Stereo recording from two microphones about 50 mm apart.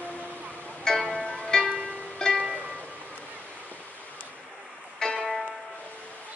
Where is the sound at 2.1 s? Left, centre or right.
Centre.